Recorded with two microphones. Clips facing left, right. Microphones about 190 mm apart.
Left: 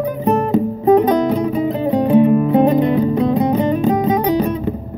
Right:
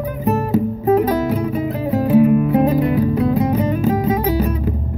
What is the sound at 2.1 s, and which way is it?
Music, 30° left (ahead or behind).